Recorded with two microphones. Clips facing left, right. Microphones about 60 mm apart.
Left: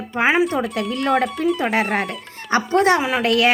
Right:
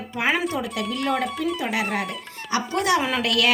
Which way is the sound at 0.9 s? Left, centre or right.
Left.